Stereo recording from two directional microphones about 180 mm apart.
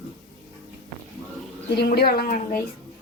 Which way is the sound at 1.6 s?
65° left (ahead or behind).